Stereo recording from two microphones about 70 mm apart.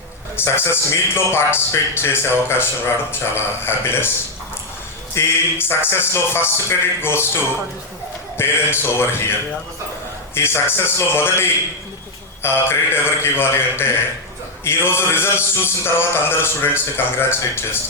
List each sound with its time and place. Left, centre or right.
0.3 s a man's voice: left
5.1 s a man's voice: left
8.4 s a man's voice: left
10.3 s a man's voice: left